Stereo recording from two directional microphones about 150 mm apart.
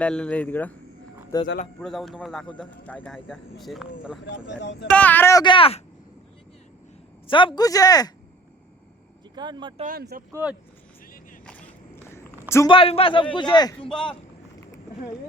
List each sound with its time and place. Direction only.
0.0 s speech: 10° left (ahead or behind)
1.3 s speech: 25° left (ahead or behind)
1.8 s speech: centre (ahead or behind)
4.9 s speech: 10° left (ahead or behind)
5.4 s speech: 35° left (ahead or behind)
7.3 s speech: 35° left (ahead or behind)
9.3 s speech: 30° right (ahead or behind)
9.8 s speech: 80° right
10.3 s speech: 10° right (ahead or behind)
12.1 s a sound: 20° left (ahead or behind)
12.6 s speech: 35° left (ahead or behind)